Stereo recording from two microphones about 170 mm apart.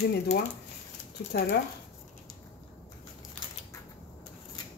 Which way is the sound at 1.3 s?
90° left.